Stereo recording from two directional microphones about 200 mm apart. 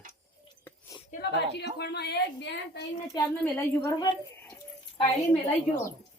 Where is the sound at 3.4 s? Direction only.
10° left (ahead or behind).